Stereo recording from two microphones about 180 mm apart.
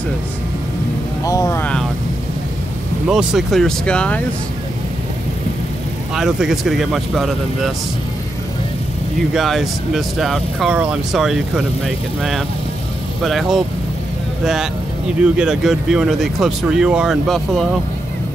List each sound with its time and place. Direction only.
1.2 s vehicle: 20° left (ahead or behind)
3.1 s speech: centre (ahead or behind)
6.1 s speech: centre (ahead or behind)
9.3 s speech: centre (ahead or behind)